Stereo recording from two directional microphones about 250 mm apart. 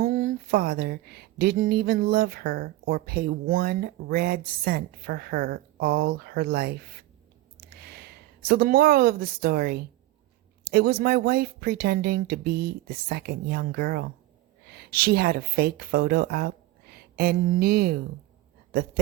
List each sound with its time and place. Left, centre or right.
0.0 s speech: right
7.8 s speech: right